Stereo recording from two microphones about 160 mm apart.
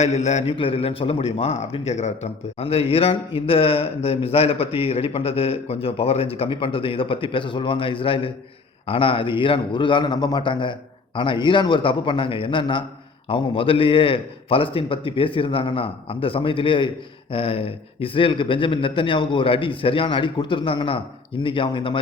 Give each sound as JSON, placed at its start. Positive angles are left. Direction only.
{"t": 0.0, "sound": "a man's voice", "side_deg": 45}